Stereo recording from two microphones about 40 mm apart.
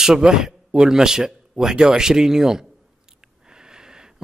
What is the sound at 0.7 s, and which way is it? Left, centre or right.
Speech, centre.